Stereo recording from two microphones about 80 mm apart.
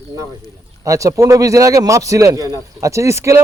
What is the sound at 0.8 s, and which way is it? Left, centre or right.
Speech, right.